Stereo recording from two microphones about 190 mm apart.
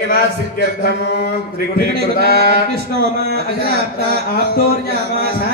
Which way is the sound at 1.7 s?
55° left (ahead or behind).